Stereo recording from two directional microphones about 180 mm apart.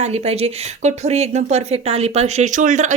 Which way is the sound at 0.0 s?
35° right (ahead or behind).